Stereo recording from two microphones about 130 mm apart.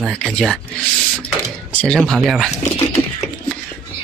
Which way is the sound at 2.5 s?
50° left (ahead or behind).